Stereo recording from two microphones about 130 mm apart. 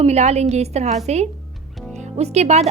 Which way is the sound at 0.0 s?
55° right (ahead or behind).